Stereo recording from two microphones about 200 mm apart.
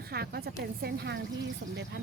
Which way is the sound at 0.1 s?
50° right (ahead or behind).